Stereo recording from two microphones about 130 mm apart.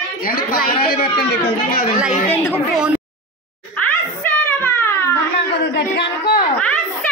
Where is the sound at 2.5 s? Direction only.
10° right (ahead or behind).